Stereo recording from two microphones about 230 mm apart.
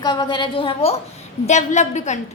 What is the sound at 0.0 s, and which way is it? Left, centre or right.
A woman's voice, centre.